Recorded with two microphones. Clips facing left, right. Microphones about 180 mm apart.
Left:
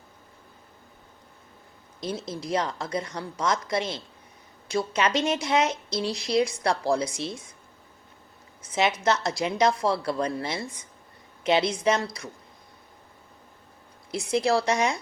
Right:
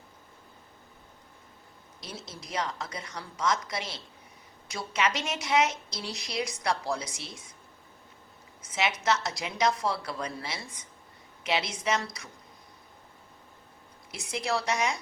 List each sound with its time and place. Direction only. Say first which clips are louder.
2.0 s a woman's voice: left 11 dB; 30° left (ahead or behind)
8.7 s a woman's voice: left 4 dB; 30° left (ahead or behind)
14.1 s a woman's voice: left 8 dB; 30° left (ahead or behind)